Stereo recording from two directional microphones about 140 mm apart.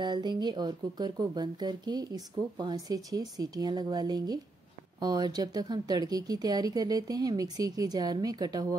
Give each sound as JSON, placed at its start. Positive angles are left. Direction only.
{"t": 0.0, "sound": "speech", "side_deg": -30}